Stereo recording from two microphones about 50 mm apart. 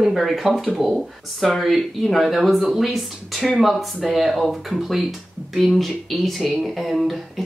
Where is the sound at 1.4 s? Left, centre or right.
Centre.